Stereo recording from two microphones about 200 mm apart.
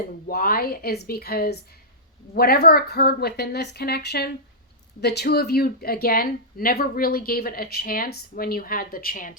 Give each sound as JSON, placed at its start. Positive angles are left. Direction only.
{"t": 0.3, "sound": "speech", "side_deg": 45}